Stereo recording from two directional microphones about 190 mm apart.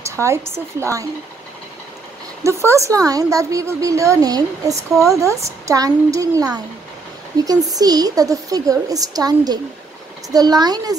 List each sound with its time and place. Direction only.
0.0 s a woman's voice: 15° right (ahead or behind)
2.4 s a woman's voice: 15° right (ahead or behind)
4.9 s speech: centre (ahead or behind)
5.7 s a woman's voice: 15° right (ahead or behind)